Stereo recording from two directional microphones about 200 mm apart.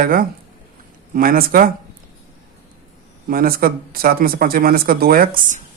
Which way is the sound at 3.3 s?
45° right (ahead or behind).